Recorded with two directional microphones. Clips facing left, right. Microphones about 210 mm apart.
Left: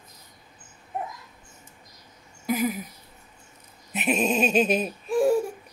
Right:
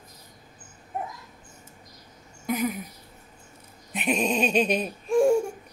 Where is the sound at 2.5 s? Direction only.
5° left (ahead or behind).